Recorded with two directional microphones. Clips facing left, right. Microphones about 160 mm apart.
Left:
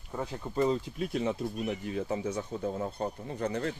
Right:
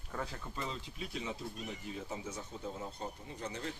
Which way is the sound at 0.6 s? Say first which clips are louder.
Left 15 dB; 45° left (ahead or behind).